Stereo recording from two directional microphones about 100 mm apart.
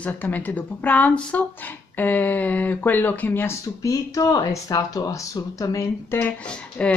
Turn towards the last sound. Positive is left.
turn(degrees=10)  # may be behind; listen again after turning